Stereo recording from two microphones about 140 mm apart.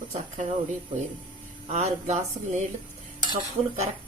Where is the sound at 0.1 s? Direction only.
50° right (ahead or behind).